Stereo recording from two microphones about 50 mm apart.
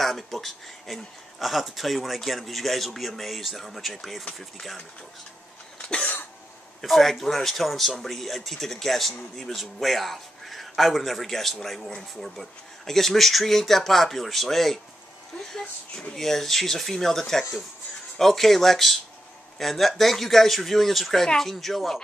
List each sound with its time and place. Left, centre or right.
0.0 s speech: centre
5.8 s cough: left
6.8 s speech: centre